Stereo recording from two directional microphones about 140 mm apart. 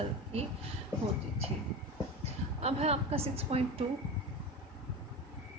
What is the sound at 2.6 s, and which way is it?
A woman's voice, 45° right (ahead or behind).